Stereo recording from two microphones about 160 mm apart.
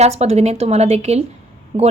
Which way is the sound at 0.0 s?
45° right (ahead or behind).